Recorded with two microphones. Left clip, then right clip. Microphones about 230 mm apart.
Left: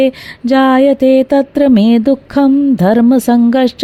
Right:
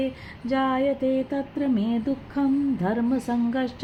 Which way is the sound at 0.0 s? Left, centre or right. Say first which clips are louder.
Left 17 dB; left.